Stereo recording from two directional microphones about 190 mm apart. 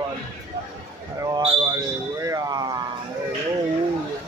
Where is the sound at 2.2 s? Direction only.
20° right (ahead or behind).